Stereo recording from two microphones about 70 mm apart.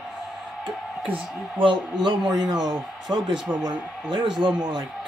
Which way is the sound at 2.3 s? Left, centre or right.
Right.